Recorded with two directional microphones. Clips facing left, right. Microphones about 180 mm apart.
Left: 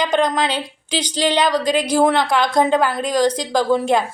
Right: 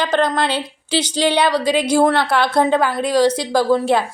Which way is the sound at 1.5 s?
10° right (ahead or behind).